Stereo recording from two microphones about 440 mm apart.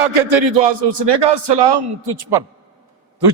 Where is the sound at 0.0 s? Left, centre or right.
Right.